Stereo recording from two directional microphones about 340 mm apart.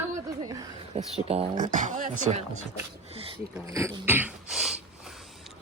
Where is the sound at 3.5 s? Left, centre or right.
Centre.